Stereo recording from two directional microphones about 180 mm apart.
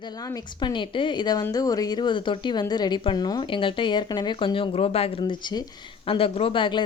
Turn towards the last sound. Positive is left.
turn(degrees=25)  # may be behind; listen again after turning